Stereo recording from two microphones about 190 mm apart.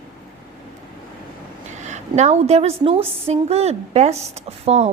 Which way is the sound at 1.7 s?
40° right (ahead or behind).